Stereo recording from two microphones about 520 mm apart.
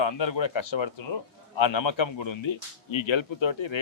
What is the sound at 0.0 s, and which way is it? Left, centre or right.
A man's voice, left.